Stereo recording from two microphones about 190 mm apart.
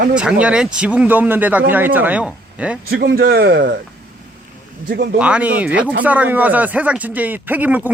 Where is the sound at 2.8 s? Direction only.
55° right (ahead or behind).